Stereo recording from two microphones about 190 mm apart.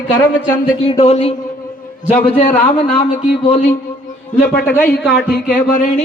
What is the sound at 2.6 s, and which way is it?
Speech, 30° left (ahead or behind).